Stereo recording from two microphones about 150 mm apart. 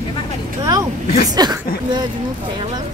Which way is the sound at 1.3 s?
25° right (ahead or behind).